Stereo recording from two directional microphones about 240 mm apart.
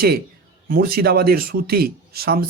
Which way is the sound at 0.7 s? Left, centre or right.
Right.